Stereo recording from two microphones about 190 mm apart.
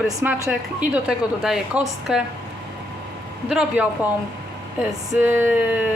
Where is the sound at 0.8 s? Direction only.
5° right (ahead or behind).